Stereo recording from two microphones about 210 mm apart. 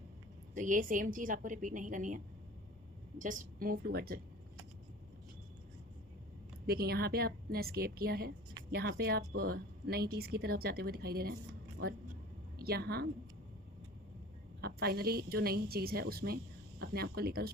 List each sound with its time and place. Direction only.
0.5 s a woman's voice: 40° right (ahead or behind)
6.7 s a woman's voice: 50° right (ahead or behind)
12.6 s a woman's voice: 50° right (ahead or behind)
14.6 s a woman's voice: 50° right (ahead or behind)